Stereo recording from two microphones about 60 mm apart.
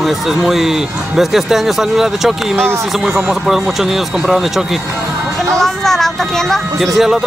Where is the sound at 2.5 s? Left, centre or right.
Right.